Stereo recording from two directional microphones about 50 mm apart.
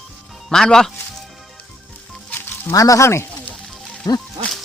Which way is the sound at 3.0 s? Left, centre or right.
Left.